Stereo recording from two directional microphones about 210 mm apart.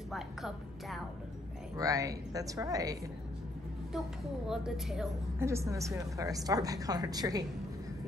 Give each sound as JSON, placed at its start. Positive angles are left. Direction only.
{"t": 0.1, "sound": "a woman's voice", "side_deg": 0}
{"t": 1.8, "sound": "a woman's voice", "side_deg": -15}
{"t": 4.5, "sound": "a woman's voice", "side_deg": 0}
{"t": 5.4, "sound": "a woman's voice", "side_deg": -15}